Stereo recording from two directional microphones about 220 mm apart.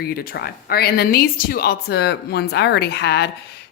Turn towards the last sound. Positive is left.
turn(degrees=50)  # may be behind; listen again after turning